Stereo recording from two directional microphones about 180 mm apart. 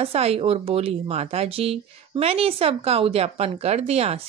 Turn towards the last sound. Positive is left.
turn(degrees=-35)  # may be behind; listen again after turning